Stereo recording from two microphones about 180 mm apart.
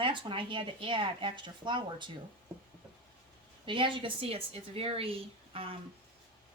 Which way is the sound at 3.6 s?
30° right (ahead or behind).